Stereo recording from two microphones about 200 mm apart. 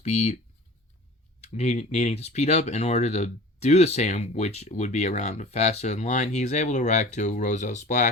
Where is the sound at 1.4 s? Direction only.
35° left (ahead or behind).